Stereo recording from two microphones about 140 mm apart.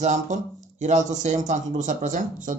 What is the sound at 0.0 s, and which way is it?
Speech, 60° right (ahead or behind).